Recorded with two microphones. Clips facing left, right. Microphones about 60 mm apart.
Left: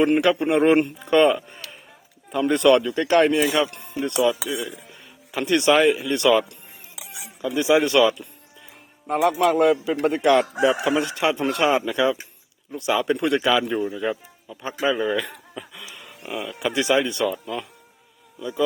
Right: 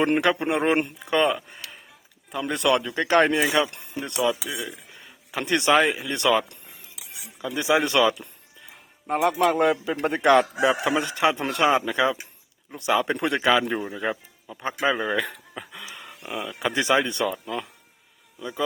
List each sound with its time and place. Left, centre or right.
0.2 s speech: right; by 2.9 s centre
2.9 s speech: right
3.3 s speech: centre
6.9 s cutlery: left
7.4 s a man's voice: right
15.5 s a sound: right
16.4 s speech: right